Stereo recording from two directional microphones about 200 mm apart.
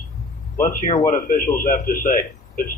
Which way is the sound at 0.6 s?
45° left (ahead or behind).